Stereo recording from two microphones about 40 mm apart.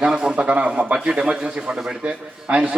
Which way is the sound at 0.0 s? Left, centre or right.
Centre.